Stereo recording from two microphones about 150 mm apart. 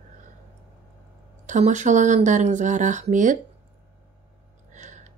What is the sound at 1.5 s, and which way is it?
Speech, 55° right (ahead or behind).